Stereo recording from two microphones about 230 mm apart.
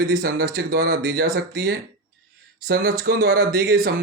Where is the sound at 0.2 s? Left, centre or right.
Right.